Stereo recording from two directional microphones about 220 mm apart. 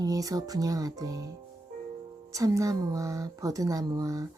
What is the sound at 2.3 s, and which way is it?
Speech, 15° right (ahead or behind).